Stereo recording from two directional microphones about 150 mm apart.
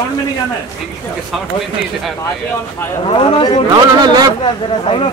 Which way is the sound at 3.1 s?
35° left (ahead or behind).